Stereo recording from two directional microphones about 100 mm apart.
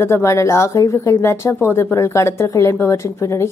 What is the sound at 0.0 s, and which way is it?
Speech, 30° left (ahead or behind).